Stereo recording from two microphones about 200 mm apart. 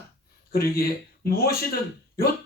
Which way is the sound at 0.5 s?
50° left (ahead or behind).